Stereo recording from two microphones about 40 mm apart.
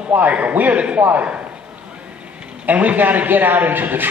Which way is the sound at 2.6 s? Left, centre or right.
Right.